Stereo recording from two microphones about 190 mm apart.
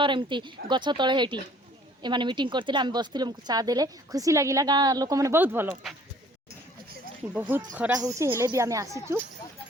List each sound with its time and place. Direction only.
0.0 s speech: 25° right (ahead or behind)
7.5 s speech: 10° right (ahead or behind)